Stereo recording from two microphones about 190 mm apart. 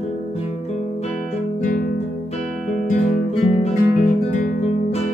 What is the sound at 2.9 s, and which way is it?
Guitar, 35° left (ahead or behind).